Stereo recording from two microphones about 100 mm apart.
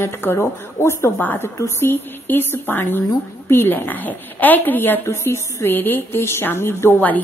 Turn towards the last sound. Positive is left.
turn(degrees=20)  # may be behind; listen again after turning